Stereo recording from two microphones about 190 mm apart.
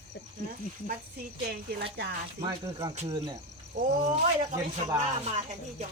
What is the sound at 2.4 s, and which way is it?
Speech, 20° right (ahead or behind).